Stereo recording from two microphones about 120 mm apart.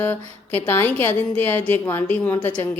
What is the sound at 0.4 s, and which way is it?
A woman's voice, 20° left (ahead or behind).